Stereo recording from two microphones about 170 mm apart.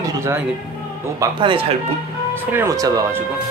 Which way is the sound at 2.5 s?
15° right (ahead or behind).